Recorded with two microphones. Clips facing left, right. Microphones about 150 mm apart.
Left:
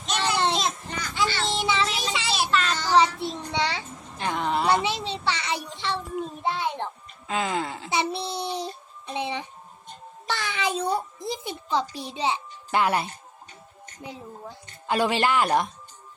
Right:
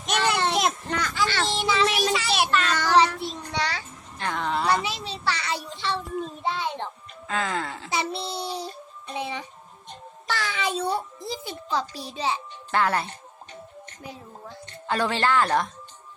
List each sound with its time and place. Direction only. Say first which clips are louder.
0.0 s a sound: right 1 dB; 60° right (ahead or behind)
2.3 s child singing: right 2 dB; 60° right (ahead or behind)
3.2 s child singing: left 2 dB; 20° left (ahead or behind)
4.7 s a sound: left 2 dB; 25° left (ahead or behind)
7.3 s a child's voice: left 1 dB; 15° left (ahead or behind)
14.8 s speech: left 1 dB; 15° left (ahead or behind)